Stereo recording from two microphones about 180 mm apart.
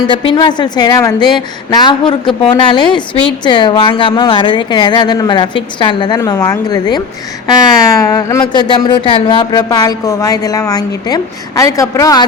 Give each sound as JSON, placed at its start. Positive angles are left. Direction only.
{"t": 0.1, "sound": "a woman's voice", "side_deg": 30}